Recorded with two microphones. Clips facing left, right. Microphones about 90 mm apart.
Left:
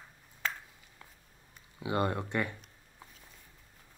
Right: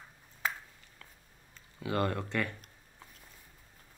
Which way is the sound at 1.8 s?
20° left (ahead or behind).